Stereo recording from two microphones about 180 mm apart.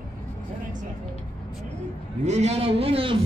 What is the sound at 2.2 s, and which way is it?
Speech, 40° right (ahead or behind).